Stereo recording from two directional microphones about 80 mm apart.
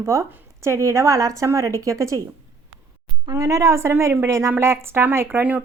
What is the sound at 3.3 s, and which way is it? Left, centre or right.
A woman's voice, right.